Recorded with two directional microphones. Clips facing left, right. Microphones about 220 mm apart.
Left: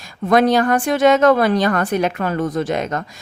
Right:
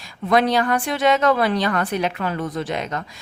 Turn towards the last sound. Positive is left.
turn(degrees=45)  # may be behind; listen again after turning